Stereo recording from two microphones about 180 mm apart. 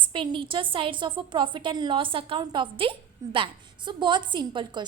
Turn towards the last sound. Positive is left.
turn(degrees=-25)  # may be behind; listen again after turning